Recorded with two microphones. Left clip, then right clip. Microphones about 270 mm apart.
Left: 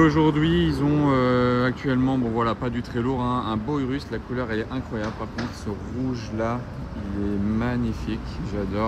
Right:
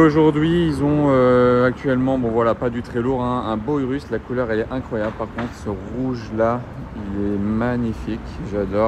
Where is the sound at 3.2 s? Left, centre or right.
Right.